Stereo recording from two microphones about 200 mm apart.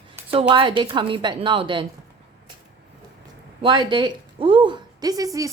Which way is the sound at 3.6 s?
25° right (ahead or behind).